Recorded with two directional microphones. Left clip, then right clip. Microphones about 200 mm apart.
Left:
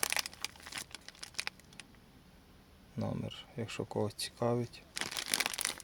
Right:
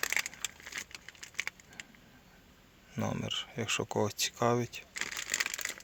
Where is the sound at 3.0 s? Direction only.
Centre (ahead or behind).